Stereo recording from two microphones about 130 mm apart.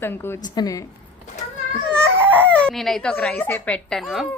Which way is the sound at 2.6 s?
5° left (ahead or behind).